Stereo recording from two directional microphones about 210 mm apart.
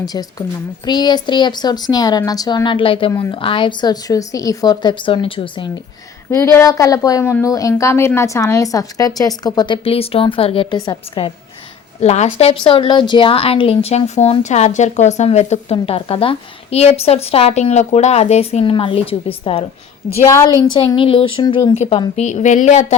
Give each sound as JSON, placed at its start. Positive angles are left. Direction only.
{"t": 0.0, "sound": "a woman's voice", "side_deg": 20}
{"t": 3.1, "sound": "a woman's voice", "side_deg": 15}
{"t": 3.3, "sound": "a woman's voice", "side_deg": 25}
{"t": 11.9, "sound": "a woman's voice", "side_deg": 30}